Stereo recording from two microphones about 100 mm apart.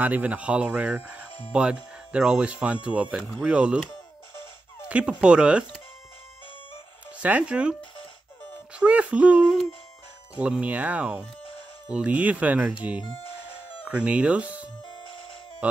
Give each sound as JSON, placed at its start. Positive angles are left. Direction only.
{"t": 0.0, "sound": "speech", "side_deg": -15}
{"t": 4.8, "sound": "speech", "side_deg": -10}
{"t": 7.2, "sound": "speech", "side_deg": -15}
{"t": 8.7, "sound": "speech", "side_deg": -15}
{"t": 13.8, "sound": "speech", "side_deg": -15}
{"t": 14.8, "sound": "music", "side_deg": 50}
{"t": 15.6, "sound": "music", "side_deg": -15}